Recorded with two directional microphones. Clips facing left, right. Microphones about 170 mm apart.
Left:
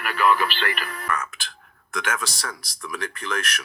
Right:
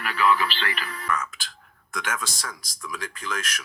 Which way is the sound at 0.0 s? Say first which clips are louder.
Left 2 dB; 50° left (ahead or behind).